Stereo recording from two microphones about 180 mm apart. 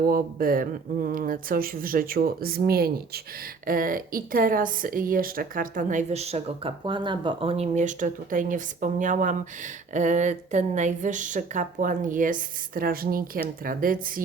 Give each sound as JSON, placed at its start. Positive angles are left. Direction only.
{"t": 0.1, "sound": "speech", "side_deg": -55}